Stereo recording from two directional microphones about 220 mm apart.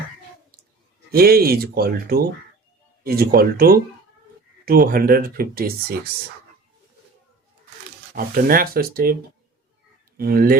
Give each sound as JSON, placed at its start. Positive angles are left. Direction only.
{"t": 1.1, "sound": "speech", "side_deg": -45}
{"t": 8.1, "sound": "speech", "side_deg": -40}
{"t": 10.2, "sound": "speech", "side_deg": -45}